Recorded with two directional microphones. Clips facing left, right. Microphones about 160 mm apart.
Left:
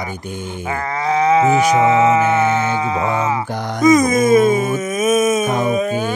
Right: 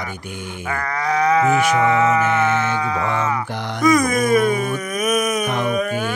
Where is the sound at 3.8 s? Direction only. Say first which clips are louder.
Left 4 dB; 20° left (ahead or behind).